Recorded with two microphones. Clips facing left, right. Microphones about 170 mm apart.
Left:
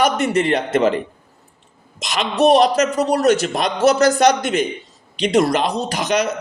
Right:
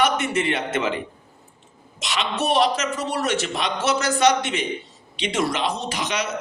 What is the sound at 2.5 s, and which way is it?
A man's voice, 40° left (ahead or behind).